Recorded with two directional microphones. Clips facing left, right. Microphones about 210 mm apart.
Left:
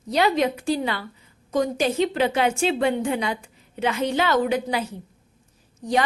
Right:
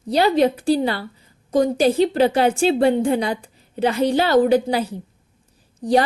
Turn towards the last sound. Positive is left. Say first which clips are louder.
# right 6 dB
turn(degrees=-35)  # may be behind; listen again after turning